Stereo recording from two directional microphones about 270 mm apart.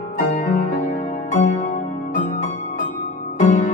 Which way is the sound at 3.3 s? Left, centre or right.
Left.